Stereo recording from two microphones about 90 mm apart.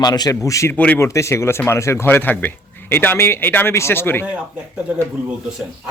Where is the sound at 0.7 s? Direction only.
20° left (ahead or behind).